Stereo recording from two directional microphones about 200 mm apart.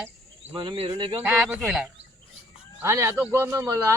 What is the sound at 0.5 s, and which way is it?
Speech, 25° right (ahead or behind).